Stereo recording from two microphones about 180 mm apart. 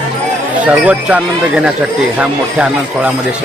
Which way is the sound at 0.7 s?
10° right (ahead or behind).